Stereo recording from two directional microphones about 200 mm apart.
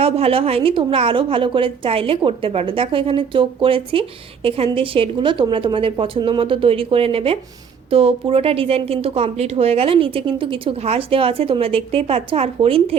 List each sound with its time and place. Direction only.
0.0 s speech: 30° right (ahead or behind)